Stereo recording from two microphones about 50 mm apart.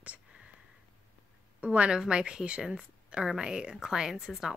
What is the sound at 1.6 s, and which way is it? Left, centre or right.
A woman's voice, centre.